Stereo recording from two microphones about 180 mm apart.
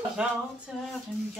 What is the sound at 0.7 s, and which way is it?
Speech, 5° right (ahead or behind).